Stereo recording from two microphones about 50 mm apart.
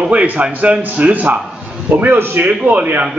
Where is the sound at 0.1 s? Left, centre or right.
Right.